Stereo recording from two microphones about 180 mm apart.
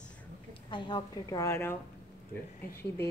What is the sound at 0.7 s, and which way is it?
A woman's voice, 25° left (ahead or behind).